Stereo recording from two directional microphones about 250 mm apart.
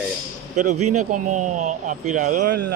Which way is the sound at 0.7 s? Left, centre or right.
Right.